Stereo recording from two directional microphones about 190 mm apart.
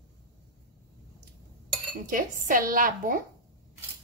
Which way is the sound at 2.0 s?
45° right (ahead or behind).